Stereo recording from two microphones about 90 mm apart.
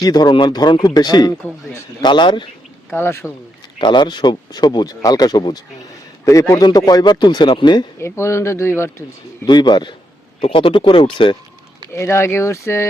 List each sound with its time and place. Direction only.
0.0 s speech: 50° left (ahead or behind)
2.9 s speech: 25° left (ahead or behind)
3.8 s speech: 60° left (ahead or behind)
7.9 s speech: 30° left (ahead or behind)
9.5 s speech: 55° left (ahead or behind)
10.4 s speech: 85° left
11.9 s speech: 30° left (ahead or behind)